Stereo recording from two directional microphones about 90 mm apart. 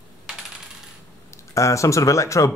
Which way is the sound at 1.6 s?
35° left (ahead or behind).